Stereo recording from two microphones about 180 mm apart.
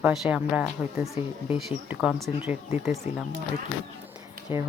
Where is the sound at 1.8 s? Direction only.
10° right (ahead or behind).